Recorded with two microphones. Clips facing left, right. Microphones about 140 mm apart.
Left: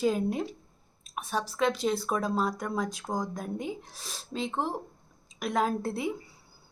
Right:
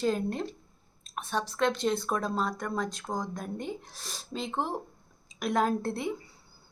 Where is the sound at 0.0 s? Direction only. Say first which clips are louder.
Left 2 dB; 5° left (ahead or behind).